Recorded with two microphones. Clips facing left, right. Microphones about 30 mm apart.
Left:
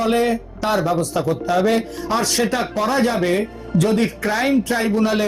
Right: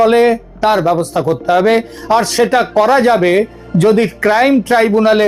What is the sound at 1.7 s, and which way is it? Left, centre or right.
Speech, right.